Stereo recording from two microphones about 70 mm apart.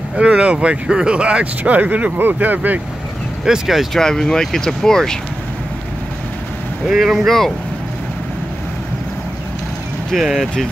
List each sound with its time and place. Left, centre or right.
0.2 s speech: centre
3.4 s speech: centre
4.0 s speech: centre
6.9 s speech: centre
10.1 s speech: centre